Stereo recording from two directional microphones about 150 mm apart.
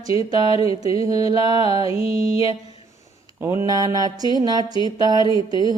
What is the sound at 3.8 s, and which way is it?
Mantra, 25° right (ahead or behind).